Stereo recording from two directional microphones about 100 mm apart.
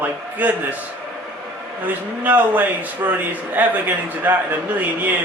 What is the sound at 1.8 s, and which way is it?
A man's voice, 15° right (ahead or behind).